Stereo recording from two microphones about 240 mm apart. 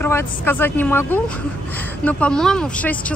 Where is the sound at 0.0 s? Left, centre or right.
Centre.